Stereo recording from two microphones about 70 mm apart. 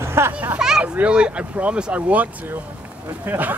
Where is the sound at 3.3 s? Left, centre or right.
Right.